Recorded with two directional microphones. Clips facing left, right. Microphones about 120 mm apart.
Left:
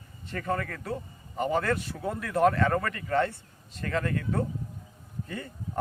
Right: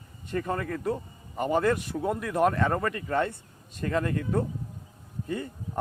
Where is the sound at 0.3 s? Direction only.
20° right (ahead or behind).